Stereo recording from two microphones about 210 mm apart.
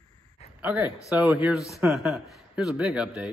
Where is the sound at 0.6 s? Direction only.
5° right (ahead or behind).